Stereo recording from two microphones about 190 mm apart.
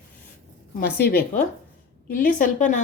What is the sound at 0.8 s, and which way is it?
A woman's voice, 55° left (ahead or behind).